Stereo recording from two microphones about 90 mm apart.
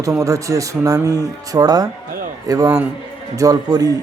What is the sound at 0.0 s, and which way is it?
Speech, 40° right (ahead or behind).